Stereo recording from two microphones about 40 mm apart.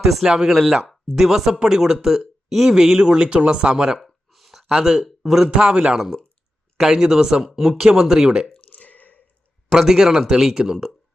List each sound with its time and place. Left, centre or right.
0.0 s speech: centre
0.5 s speech: centre; by 3.8 s right
4.0 s a sound: centre
4.7 s a man's voice: centre
5.5 s speech: right
8.7 s a sound: left
9.6 s speech: centre